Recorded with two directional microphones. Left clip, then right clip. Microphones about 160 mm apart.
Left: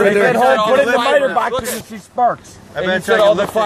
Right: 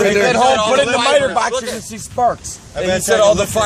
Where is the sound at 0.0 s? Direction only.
10° right (ahead or behind).